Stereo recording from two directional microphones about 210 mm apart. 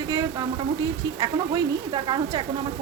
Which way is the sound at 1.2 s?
20° right (ahead or behind).